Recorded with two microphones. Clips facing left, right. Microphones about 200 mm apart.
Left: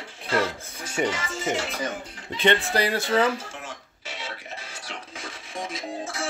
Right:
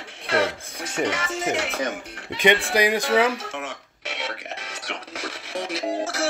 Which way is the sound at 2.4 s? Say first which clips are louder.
Right 3 dB; 15° right (ahead or behind).